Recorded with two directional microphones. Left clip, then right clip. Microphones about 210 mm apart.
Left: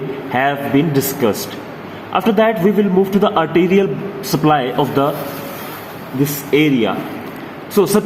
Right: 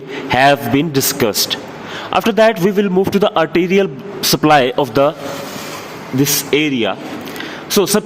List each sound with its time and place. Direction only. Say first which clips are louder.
0.3 s a man's voice: right 6 dB; 50° right (ahead or behind)
6.5 s a man's voice: left 1 dB; 50° right (ahead or behind)